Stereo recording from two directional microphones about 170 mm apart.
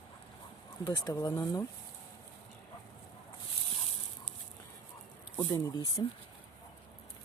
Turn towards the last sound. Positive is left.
turn(degrees=20)  # may be behind; listen again after turning